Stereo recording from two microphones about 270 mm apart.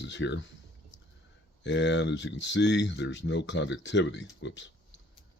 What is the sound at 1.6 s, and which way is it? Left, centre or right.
Speech, left.